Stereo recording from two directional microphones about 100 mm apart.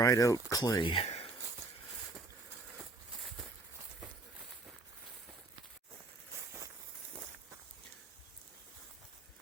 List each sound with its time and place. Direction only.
0.0 s speech: 35° left (ahead or behind)
0.8 s speech: 60° left (ahead or behind); by 1.3 s 85° left